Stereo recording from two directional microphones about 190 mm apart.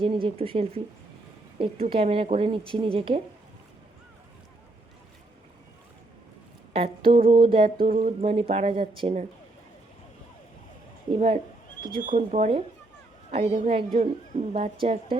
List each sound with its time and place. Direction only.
0.0 s speech: 30° right (ahead or behind)
6.7 s speech: 30° right (ahead or behind)
7.8 s speech: 45° right (ahead or behind); by 9.2 s 30° right (ahead or behind)
11.1 s speech: 35° right (ahead or behind)